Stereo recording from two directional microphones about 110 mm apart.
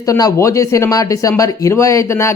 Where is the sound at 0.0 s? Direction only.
30° left (ahead or behind).